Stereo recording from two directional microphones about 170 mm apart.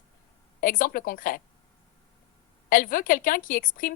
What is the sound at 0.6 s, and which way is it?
Speech, 55° left (ahead or behind).